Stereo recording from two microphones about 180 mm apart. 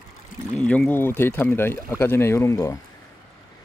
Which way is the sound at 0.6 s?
10° left (ahead or behind).